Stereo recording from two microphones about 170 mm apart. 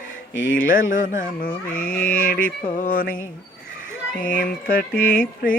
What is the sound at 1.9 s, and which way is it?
Music, 60° left (ahead or behind).